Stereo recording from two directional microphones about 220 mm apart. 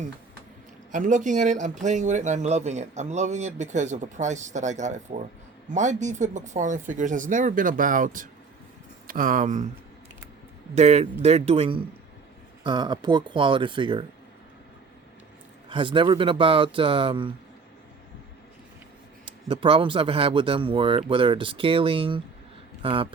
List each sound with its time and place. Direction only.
0.9 s speech: 35° right (ahead or behind)
10.8 s speech: 30° right (ahead or behind)
15.7 s speech: 20° right (ahead or behind)
19.2 s a man's voice: 25° right (ahead or behind)